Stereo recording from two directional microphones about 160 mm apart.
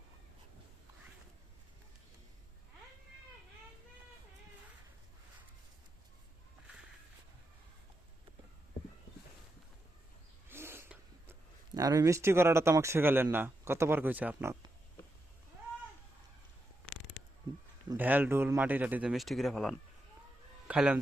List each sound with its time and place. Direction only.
10.5 s speech: 15° right (ahead or behind)
17.9 s speech: 10° right (ahead or behind)